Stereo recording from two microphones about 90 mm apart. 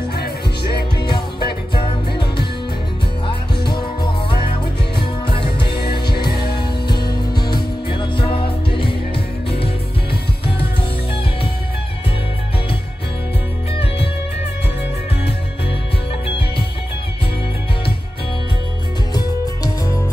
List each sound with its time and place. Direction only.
1.0 s music: 60° left (ahead or behind)
5.2 s music: 75° left (ahead or behind)
19.1 s music: 40° left (ahead or behind)